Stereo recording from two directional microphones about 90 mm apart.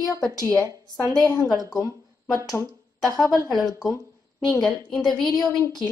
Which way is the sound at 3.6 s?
40° left (ahead or behind).